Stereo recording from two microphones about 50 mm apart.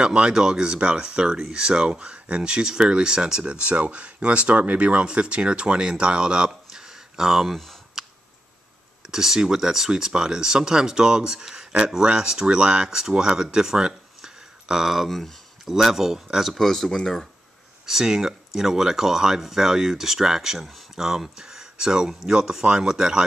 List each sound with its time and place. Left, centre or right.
0.0 s speech: centre
7.5 s speech: centre
9.0 s speech: centre
15.0 s a sound: centre
15.7 s speech: centre
16.5 s speech: centre
17.8 s speech: centre